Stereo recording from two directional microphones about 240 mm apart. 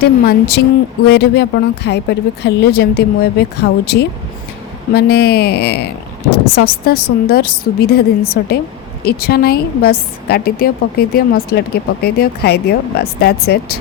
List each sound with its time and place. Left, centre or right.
0.3 s a woman's voice: left